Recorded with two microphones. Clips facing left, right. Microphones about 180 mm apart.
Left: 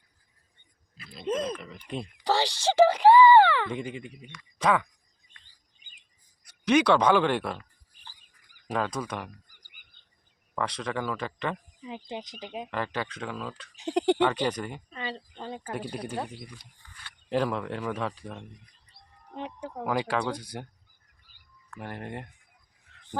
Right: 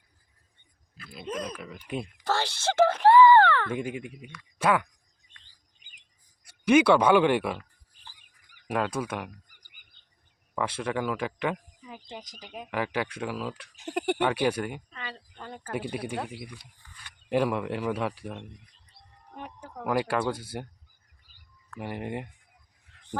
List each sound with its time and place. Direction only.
1.1 s speech: centre (ahead or behind)
2.2 s a sound: 15° left (ahead or behind)
3.7 s speech: 5° right (ahead or behind)
6.4 s a sound: 10° right (ahead or behind)
8.2 s chicken: 65° right (ahead or behind)
8.6 s speech: 5° right (ahead or behind)
10.5 s speech: 5° right (ahead or behind)
12.7 s speech: 10° right (ahead or behind)
15.0 s speech: 25° left (ahead or behind)
15.7 s speech: 5° right (ahead or behind)
19.3 s speech: 20° left (ahead or behind)
19.8 s speech: 5° right (ahead or behind)
21.8 s speech: 10° right (ahead or behind)
22.9 s a sound: 15° right (ahead or behind)